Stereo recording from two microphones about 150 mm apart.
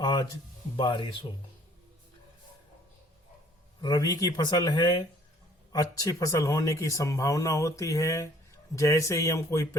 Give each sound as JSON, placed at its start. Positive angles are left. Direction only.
{"t": 0.0, "sound": "speech", "side_deg": 25}
{"t": 3.8, "sound": "speech", "side_deg": 25}